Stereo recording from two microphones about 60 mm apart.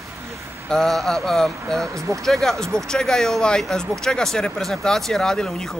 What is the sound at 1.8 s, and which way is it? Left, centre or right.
Speech, right.